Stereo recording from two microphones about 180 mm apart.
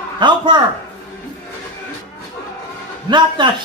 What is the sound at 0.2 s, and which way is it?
Speech, 25° right (ahead or behind).